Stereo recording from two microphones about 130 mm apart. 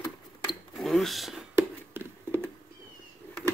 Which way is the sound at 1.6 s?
15° right (ahead or behind).